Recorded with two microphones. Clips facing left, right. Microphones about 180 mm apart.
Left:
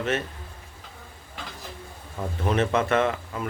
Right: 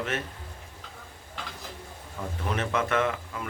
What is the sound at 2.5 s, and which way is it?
Speech, 30° left (ahead or behind).